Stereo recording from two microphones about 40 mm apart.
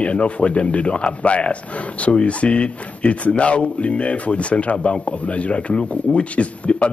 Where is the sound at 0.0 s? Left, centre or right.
Left.